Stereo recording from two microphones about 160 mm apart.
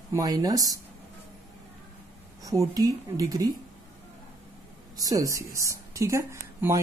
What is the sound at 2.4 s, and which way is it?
Speech, 20° right (ahead or behind).